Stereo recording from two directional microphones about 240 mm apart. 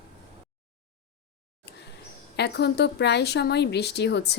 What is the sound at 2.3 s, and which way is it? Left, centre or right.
Speech, left.